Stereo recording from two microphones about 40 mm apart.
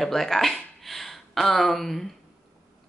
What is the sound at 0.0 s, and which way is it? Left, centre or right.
A woman's voice, centre.